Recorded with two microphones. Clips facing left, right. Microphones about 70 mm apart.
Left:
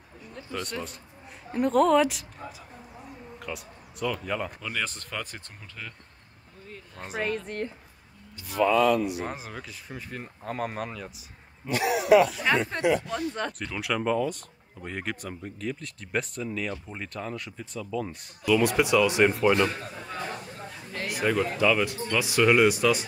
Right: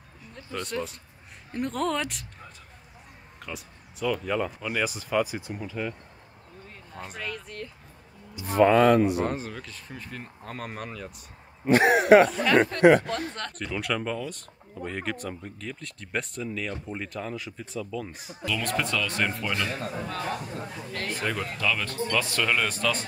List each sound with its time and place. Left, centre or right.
0.3 s speech: centre
4.6 s speech: centre
7.2 s speech: left
8.5 s speech: right
9.2 s speech: centre
11.6 s speech: right
12.5 s speech: centre
13.5 s speech: centre
20.1 s a sound: centre
20.9 s speech: centre